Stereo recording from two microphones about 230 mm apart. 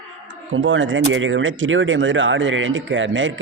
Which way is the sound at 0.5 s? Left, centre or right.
Right.